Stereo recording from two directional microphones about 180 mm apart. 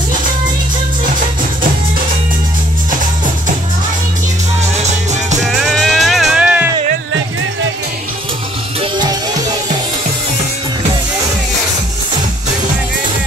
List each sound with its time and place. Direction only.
5.4 s music: centre (ahead or behind)
8.9 s music: 25° right (ahead or behind)